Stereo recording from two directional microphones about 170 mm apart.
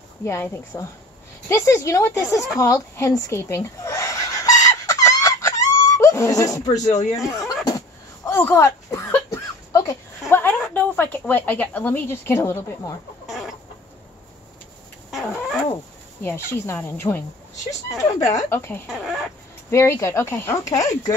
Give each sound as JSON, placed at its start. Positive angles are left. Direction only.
{"t": 0.2, "sound": "speech", "side_deg": 15}
{"t": 1.5, "sound": "a sound", "side_deg": 15}
{"t": 7.1, "sound": "speech", "side_deg": 20}
{"t": 8.3, "sound": "a sound", "side_deg": 15}
{"t": 10.3, "sound": "speech", "side_deg": 10}
{"t": 15.0, "sound": "a sound", "side_deg": 0}
{"t": 16.2, "sound": "speech", "side_deg": 10}
{"t": 18.2, "sound": "speech", "side_deg": 15}
{"t": 18.9, "sound": "speech", "side_deg": -5}
{"t": 19.7, "sound": "speech", "side_deg": 15}